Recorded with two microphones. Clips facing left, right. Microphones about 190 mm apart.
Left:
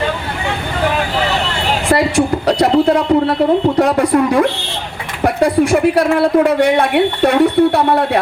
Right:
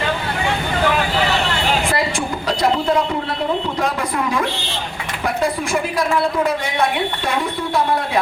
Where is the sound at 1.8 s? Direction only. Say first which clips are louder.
Left 8 dB; 65° left (ahead or behind).